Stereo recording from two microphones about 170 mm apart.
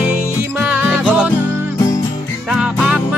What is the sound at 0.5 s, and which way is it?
Music, 10° right (ahead or behind).